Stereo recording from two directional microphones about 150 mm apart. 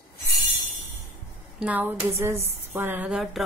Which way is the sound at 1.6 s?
10° right (ahead or behind).